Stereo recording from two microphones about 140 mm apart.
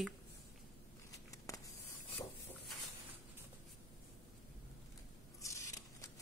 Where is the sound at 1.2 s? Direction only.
25° left (ahead or behind).